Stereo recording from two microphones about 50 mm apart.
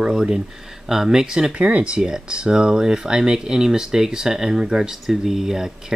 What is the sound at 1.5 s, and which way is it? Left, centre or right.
Speech, right.